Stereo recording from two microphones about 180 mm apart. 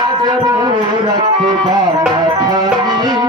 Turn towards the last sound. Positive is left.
turn(degrees=-25)  # may be behind; listen again after turning